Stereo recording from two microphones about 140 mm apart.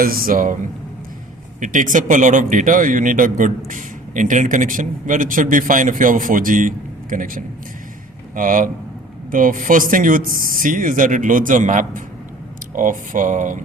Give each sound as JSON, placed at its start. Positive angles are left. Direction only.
{"t": 0.0, "sound": "speech", "side_deg": -90}
{"t": 1.6, "sound": "a man's voice", "side_deg": -65}